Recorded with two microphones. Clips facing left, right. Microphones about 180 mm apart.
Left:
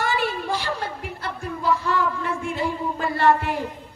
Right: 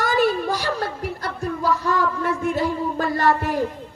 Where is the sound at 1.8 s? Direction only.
40° right (ahead or behind).